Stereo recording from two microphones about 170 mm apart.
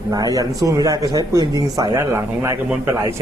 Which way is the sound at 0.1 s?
20° right (ahead or behind).